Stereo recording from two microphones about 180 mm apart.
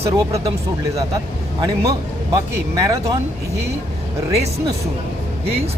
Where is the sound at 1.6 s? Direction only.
20° right (ahead or behind).